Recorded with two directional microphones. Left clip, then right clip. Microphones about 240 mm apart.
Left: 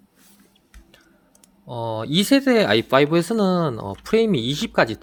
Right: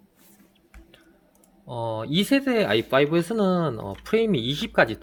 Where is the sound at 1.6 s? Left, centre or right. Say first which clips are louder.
Left 2 dB; centre.